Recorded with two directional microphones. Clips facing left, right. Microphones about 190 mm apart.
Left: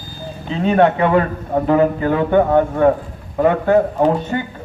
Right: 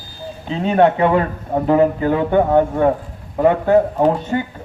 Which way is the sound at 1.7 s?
25° right (ahead or behind).